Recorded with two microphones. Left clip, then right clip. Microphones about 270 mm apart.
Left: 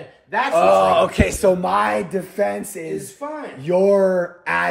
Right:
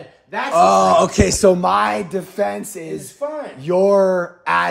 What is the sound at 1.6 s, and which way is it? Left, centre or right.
Speech, centre.